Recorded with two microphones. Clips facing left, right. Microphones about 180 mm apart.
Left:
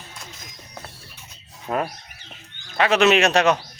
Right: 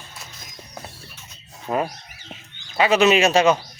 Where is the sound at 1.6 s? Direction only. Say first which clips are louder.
Right 1 dB; 10° right (ahead or behind).